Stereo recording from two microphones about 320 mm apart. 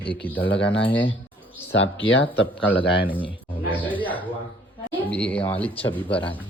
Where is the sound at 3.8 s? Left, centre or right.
Centre.